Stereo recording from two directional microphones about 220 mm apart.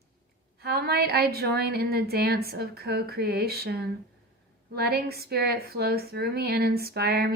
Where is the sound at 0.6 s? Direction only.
45° right (ahead or behind).